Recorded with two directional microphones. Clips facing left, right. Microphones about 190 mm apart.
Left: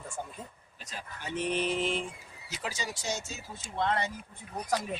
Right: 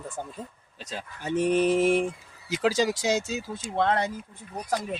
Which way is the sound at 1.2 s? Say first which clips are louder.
Right 8 dB; 45° right (ahead or behind).